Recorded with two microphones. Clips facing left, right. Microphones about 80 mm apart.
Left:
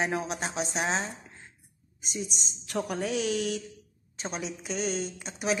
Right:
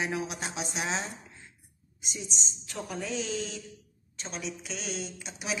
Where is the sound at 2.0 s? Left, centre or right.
Left.